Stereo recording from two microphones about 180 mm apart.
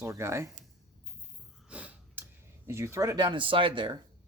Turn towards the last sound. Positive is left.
turn(degrees=-25)  # may be behind; listen again after turning